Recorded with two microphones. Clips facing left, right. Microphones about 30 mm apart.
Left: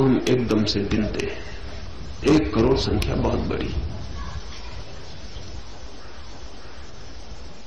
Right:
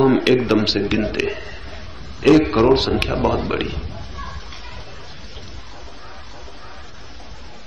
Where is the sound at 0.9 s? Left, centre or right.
Right.